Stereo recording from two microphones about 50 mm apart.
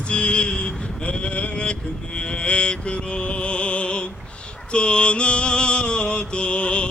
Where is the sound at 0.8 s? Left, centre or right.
Left.